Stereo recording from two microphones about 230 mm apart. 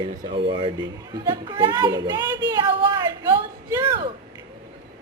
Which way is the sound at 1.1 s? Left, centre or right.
Centre.